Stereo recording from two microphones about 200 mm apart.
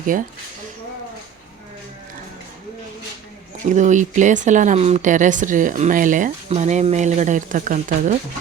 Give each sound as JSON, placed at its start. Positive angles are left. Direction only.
{"t": 0.1, "sound": "speech", "side_deg": -45}
{"t": 3.7, "sound": "speech", "side_deg": -40}